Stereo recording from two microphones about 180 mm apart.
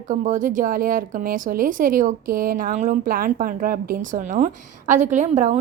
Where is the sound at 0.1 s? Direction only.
45° right (ahead or behind).